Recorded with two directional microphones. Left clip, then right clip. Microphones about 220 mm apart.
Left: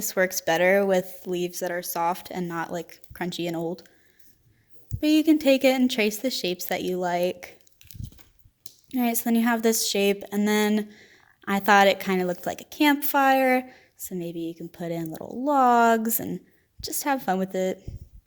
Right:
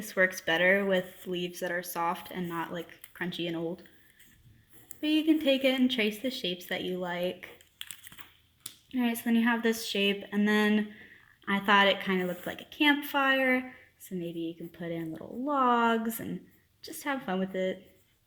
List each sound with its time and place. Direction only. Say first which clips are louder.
0.0 s a woman's voice: left 3 dB; 45° left (ahead or behind)
4.9 s a woman's voice: left 6 dB; 50° left (ahead or behind)
8.9 s a woman's voice: left 5 dB; 45° left (ahead or behind)